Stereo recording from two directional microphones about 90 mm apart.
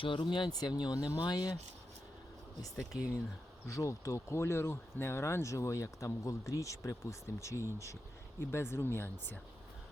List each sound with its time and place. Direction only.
0.0 s speech: 65° left (ahead or behind); by 1.5 s 50° left (ahead or behind)
2.9 s speech: 15° right (ahead or behind)
3.7 s speech: 35° left (ahead or behind)